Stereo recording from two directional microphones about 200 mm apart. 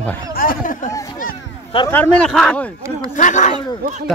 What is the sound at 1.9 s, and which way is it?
Speech, 5° left (ahead or behind).